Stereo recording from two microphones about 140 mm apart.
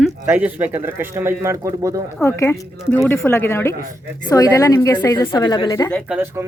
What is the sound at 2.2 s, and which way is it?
Speech, 20° left (ahead or behind).